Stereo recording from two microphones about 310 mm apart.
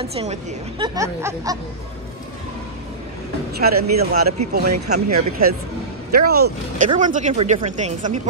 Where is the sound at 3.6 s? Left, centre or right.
Right.